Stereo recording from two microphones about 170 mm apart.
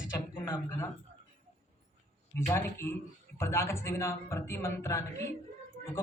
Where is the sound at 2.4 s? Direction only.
15° left (ahead or behind).